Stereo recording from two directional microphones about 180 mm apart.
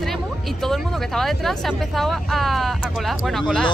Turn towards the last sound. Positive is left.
turn(degrees=0)  # may be behind; listen again after turning